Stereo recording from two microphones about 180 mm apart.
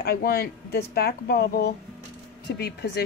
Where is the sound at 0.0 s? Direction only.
60° left (ahead or behind).